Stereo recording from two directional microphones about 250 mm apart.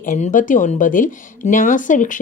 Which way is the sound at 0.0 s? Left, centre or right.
Left.